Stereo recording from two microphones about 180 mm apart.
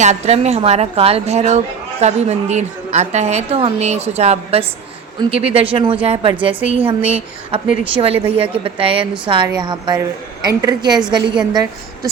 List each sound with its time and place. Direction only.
0.0 s a woman's voice: 40° right (ahead or behind); by 12.1 s 20° right (ahead or behind)